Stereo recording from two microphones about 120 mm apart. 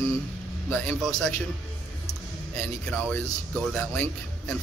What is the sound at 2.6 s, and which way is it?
A man's voice, 5° left (ahead or behind).